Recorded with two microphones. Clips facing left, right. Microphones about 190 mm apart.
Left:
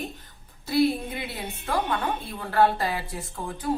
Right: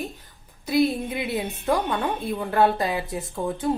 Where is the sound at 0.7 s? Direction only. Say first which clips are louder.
Right 1 dB; 20° right (ahead or behind).